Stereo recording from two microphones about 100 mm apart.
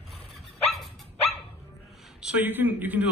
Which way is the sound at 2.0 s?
5° right (ahead or behind).